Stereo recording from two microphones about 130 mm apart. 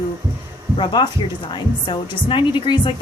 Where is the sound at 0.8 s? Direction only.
35° left (ahead or behind).